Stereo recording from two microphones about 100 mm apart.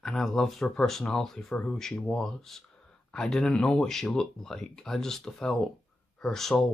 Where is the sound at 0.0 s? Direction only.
5° left (ahead or behind).